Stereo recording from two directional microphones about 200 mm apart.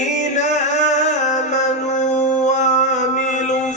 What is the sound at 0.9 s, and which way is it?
Music, 35° left (ahead or behind).